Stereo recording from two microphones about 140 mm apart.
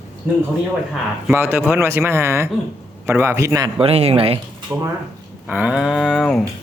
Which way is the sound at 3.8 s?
45° right (ahead or behind).